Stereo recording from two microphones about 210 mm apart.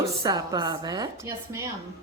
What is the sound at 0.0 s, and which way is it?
A woman's voice, 15° right (ahead or behind).